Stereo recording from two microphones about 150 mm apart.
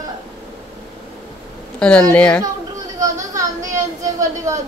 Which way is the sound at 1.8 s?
5° left (ahead or behind).